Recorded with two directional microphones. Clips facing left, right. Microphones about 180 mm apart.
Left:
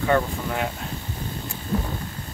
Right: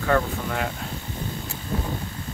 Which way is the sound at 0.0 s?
5° left (ahead or behind).